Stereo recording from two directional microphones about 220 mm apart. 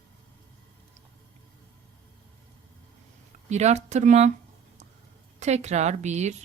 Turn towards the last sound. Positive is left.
turn(degrees=-30)  # may be behind; listen again after turning